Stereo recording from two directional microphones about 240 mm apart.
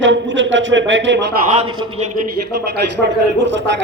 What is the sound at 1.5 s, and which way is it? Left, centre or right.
Speech, right.